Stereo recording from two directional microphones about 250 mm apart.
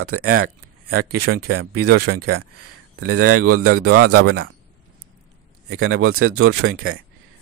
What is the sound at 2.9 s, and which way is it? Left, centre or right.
Speech, right.